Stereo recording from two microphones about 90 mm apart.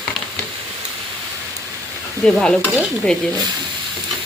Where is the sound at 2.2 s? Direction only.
10° left (ahead or behind).